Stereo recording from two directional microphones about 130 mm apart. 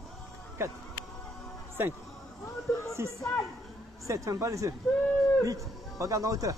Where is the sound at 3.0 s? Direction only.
20° right (ahead or behind).